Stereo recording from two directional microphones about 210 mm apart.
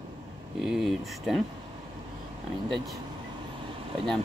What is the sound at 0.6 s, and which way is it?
Speech, centre (ahead or behind).